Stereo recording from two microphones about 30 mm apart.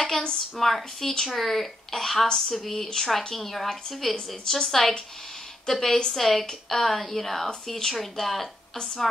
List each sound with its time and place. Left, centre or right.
0.0 s a sound: left
0.6 s a woman's voice: centre
4.5 s a woman's voice: centre